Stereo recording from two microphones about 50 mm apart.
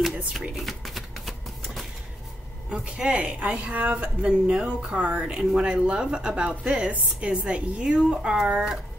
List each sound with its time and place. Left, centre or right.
0.3 s shuffling cards: centre
2.7 s speech: right
4.2 s speech: centre
4.9 s speech: right
5.2 s a woman's voice: centre